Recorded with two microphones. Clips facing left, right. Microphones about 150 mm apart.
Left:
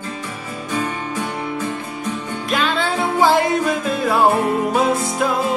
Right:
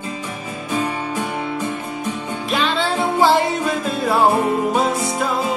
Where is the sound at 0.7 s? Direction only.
15° right (ahead or behind).